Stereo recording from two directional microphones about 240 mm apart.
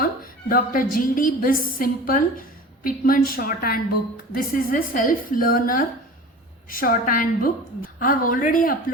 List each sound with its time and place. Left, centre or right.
0.0 s music: left
0.9 s a woman's voice: left